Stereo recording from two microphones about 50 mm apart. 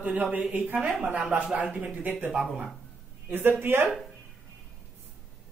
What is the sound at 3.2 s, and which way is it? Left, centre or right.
Speech, right.